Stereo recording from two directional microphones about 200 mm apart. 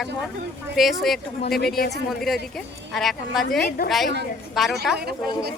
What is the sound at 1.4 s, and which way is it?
Speech, 50° left (ahead or behind).